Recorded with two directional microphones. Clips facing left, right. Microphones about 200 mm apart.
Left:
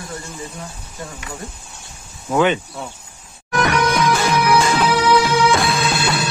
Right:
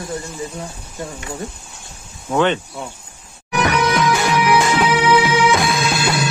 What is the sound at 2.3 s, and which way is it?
Speech, 5° left (ahead or behind).